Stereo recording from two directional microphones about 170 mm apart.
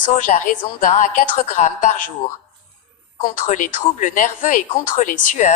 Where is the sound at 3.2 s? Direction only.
50° left (ahead or behind).